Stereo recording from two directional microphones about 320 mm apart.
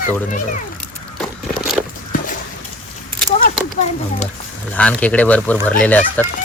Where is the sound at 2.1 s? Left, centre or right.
Left.